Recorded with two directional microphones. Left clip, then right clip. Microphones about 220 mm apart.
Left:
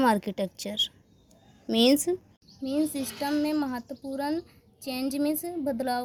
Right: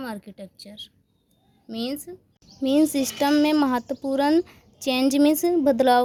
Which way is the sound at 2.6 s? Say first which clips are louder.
Right 8 dB; 40° right (ahead or behind).